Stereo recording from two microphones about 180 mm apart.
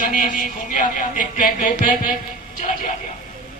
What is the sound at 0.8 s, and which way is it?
A woman's voice, 50° left (ahead or behind).